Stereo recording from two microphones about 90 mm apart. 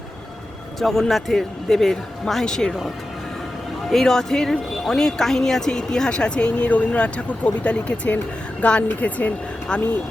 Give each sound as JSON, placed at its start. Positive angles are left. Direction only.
{"t": 0.8, "sound": "a man's voice", "side_deg": 5}
{"t": 3.8, "sound": "speech", "side_deg": 5}